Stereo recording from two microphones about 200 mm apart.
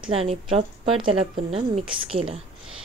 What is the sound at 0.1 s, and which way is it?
A woman's voice, 30° right (ahead or behind).